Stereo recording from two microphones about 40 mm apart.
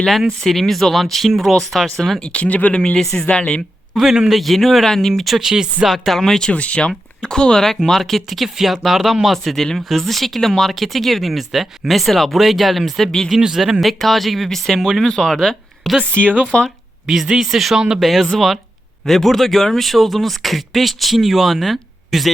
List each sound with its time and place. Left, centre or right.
0.4 s speech: centre
2.2 s speech: left
2.7 s a woman's voice: left
3.9 s a man's voice: centre
4.3 s speech: centre
5.4 s speech: centre
6.1 s speech: centre
6.4 s speech: left; by 13.1 s centre
13.1 s speech: centre
14.8 s speech: centre
15.9 s speech: centre
16.5 s a woman's voice: left
17.2 s speech: centre
18.0 s speech: centre